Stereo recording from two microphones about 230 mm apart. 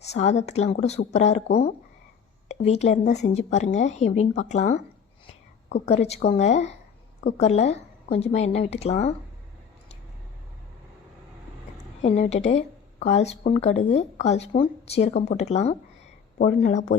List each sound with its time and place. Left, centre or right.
0.0 s a woman's voice: left
2.5 s a woman's voice: left
5.8 s a woman's voice: left
12.0 s a woman's voice: left